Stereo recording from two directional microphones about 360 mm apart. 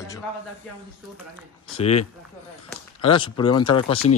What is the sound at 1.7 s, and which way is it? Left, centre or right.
Speech, centre.